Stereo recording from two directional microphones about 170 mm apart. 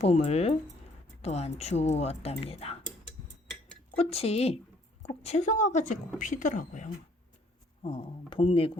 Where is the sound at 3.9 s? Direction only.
35° left (ahead or behind).